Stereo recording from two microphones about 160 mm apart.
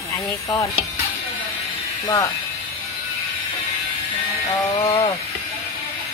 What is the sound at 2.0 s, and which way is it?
Speech, 20° left (ahead or behind).